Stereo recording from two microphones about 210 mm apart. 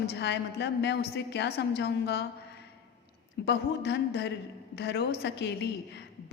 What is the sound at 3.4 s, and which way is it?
A woman's voice, 55° left (ahead or behind).